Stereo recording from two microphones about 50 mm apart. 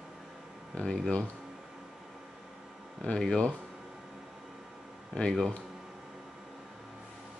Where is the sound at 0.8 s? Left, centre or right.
Left.